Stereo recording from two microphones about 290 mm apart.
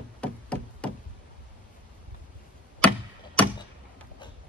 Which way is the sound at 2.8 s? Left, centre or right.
Centre.